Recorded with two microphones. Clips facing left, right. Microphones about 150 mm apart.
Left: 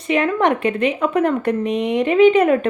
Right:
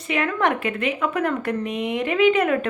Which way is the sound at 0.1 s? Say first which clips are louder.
Left 5 dB; 25° left (ahead or behind).